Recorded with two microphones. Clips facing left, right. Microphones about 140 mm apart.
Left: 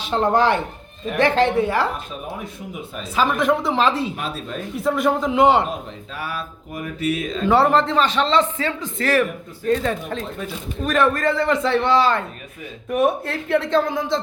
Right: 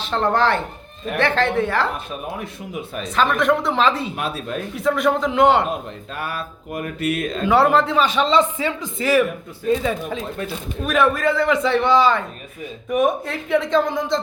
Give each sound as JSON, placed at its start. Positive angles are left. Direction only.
{"t": 0.0, "sound": "a woman's voice", "side_deg": 15}
{"t": 3.2, "sound": "a man's voice", "side_deg": 0}
{"t": 4.2, "sound": "mantra", "side_deg": -60}
{"t": 4.7, "sound": "a man's voice", "side_deg": 0}
{"t": 6.1, "sound": "mantra", "side_deg": -55}
{"t": 7.4, "sound": "a man's voice", "side_deg": 0}